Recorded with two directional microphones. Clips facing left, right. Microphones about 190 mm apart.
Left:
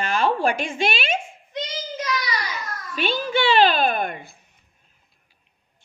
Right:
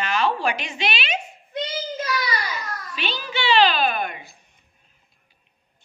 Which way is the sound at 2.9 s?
50° left (ahead or behind).